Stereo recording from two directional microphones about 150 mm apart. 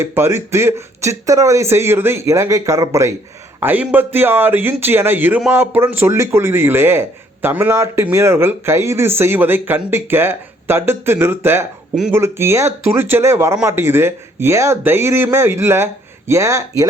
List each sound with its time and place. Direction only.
0.0 s speech: 15° right (ahead or behind)